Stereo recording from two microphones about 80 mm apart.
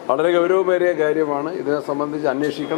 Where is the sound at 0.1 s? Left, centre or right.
Centre.